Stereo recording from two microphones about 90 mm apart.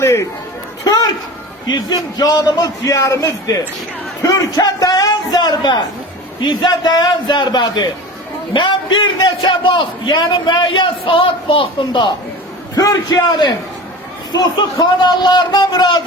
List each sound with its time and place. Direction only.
0.0 s speech: 30° left (ahead or behind)
0.9 s speech: 50° left (ahead or behind)
2.1 s a man's voice: 45° left (ahead or behind)
8.5 s a man's voice: 65° left (ahead or behind); by 11.7 s 85° left
11.9 s a man's voice: 55° left (ahead or behind)
12.7 s a man's voice: 45° left (ahead or behind)